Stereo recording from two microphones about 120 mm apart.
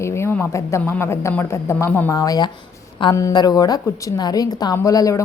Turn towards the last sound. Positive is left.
turn(degrees=30)  # may be behind; listen again after turning